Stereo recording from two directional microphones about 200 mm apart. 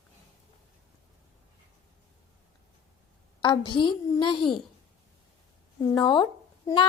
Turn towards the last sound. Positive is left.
turn(degrees=25)  # may be behind; listen again after turning